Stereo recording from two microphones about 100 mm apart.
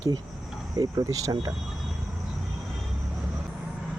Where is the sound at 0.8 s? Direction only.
35° right (ahead or behind).